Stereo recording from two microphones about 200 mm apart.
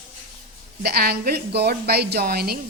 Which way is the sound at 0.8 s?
50° right (ahead or behind).